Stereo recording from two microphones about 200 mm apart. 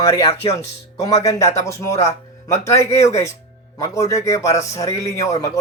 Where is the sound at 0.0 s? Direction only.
15° left (ahead or behind).